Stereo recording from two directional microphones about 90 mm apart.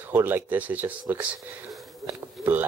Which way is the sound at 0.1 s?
20° right (ahead or behind).